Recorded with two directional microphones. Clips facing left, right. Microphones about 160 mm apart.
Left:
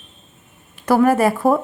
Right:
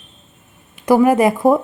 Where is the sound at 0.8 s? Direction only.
15° right (ahead or behind).